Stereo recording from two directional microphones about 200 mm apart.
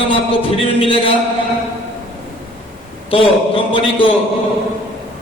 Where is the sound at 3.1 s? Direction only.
25° left (ahead or behind).